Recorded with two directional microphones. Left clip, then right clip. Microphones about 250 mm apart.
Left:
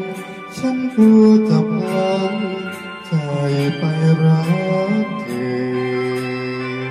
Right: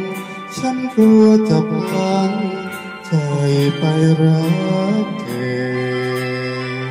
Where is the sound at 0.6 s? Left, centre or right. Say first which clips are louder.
Right 1 dB; right.